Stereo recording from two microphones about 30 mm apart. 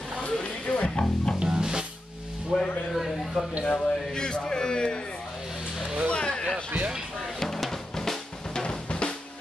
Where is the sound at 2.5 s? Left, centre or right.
Centre.